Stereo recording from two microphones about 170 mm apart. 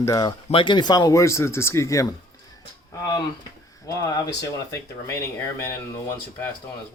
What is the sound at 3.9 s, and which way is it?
Speech, 20° left (ahead or behind).